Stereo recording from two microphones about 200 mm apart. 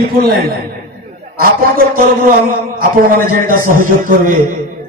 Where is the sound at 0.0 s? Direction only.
50° right (ahead or behind).